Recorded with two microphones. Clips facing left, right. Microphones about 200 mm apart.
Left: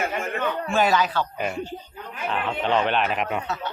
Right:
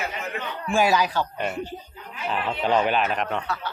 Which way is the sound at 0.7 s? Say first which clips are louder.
Right 1 dB; 10° right (ahead or behind).